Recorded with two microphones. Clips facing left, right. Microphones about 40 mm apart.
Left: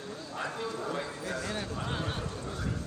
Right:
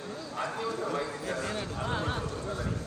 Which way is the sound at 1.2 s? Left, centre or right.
Right.